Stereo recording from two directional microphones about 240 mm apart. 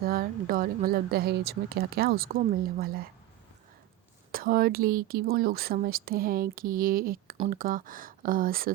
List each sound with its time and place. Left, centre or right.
0.0 s speech: right
4.3 s speech: right